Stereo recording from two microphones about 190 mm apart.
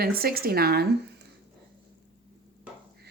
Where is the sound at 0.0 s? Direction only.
50° right (ahead or behind).